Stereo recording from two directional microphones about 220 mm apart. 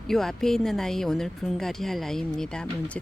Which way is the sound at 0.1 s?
Centre (ahead or behind).